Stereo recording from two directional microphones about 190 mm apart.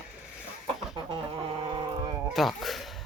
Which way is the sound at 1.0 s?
30° right (ahead or behind).